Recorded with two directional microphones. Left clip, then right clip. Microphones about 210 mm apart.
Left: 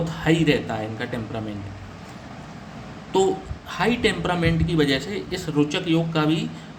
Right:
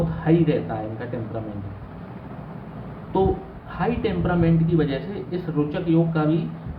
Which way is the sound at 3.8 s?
50° left (ahead or behind).